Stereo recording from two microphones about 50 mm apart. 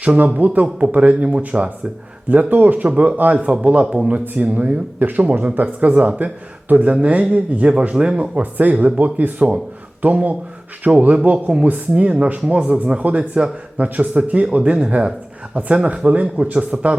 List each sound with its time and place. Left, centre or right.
0.0 s a man's voice: right
2.3 s a man's voice: right